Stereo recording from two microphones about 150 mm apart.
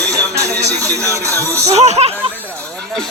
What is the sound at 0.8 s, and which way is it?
Speech, 20° right (ahead or behind).